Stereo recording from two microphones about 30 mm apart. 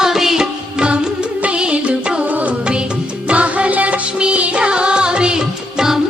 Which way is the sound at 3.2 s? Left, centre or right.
Right.